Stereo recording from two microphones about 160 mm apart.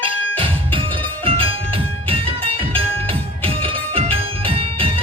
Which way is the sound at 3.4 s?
35° right (ahead or behind).